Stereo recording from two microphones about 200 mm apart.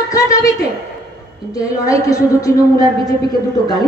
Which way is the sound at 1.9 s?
15° left (ahead or behind).